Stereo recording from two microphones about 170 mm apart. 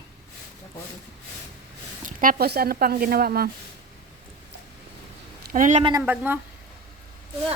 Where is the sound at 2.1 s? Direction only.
50° right (ahead or behind).